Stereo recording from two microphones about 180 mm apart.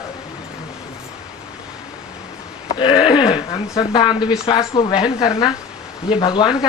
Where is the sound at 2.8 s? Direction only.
25° left (ahead or behind).